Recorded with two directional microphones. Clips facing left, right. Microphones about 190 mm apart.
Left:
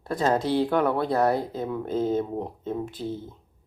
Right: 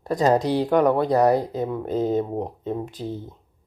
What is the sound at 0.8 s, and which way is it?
Speech, 15° right (ahead or behind).